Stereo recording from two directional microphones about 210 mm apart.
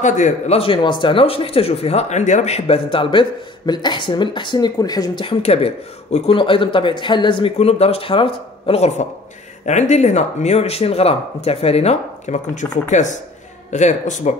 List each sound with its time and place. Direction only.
0.0 s speech: 30° left (ahead or behind)